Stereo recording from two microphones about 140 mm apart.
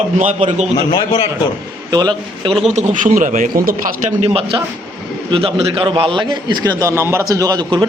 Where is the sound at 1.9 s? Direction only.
30° right (ahead or behind).